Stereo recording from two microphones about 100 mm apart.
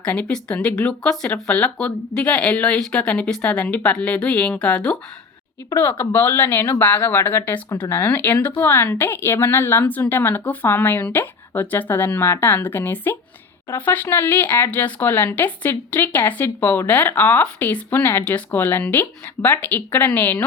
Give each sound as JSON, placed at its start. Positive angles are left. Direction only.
{"t": 0.0, "sound": "speech", "side_deg": 10}
{"t": 5.7, "sound": "a woman's voice", "side_deg": 20}